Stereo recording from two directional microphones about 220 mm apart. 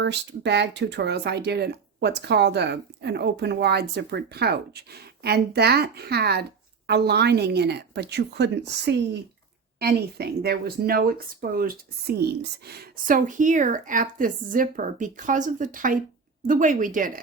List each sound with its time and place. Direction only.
0.0 s speech: 50° right (ahead or behind)